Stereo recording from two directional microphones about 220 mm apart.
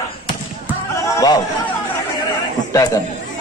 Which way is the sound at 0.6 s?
15° left (ahead or behind).